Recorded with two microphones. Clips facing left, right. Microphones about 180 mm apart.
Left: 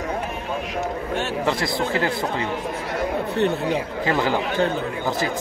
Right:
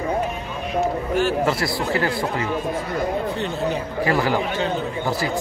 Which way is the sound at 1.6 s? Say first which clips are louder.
Even; 20° left (ahead or behind).